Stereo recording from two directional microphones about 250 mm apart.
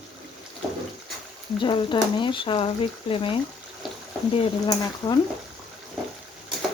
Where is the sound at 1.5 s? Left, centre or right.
Centre.